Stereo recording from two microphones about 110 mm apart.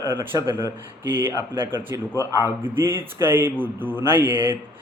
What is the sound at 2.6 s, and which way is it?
A man's voice, 20° right (ahead or behind).